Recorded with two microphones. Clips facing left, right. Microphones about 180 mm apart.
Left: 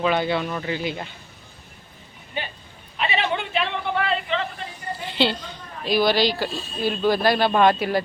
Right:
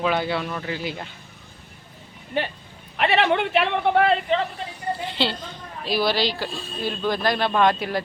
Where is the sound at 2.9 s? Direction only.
70° right (ahead or behind); by 4.2 s 55° right (ahead or behind).